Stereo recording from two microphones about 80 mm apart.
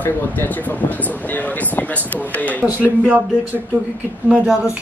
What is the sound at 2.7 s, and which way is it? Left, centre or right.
Speech, right.